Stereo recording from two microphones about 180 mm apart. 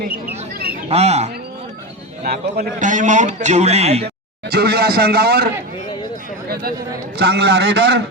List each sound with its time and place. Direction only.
0.9 s speech: 35° right (ahead or behind)
2.2 s a man's voice: 55° right (ahead or behind); by 4.0 s 35° right (ahead or behind)
4.0 s speech: 60° right (ahead or behind)
6.5 s speech: 55° right (ahead or behind)
7.2 s a man's voice: 65° right (ahead or behind)